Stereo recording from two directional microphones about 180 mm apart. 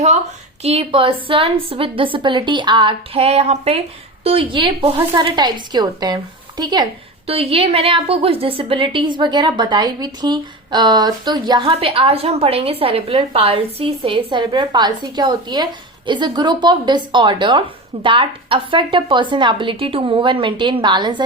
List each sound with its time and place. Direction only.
0.6 s a woman's voice: 35° right (ahead or behind)